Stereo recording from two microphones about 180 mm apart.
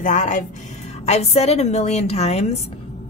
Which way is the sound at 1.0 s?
35° left (ahead or behind).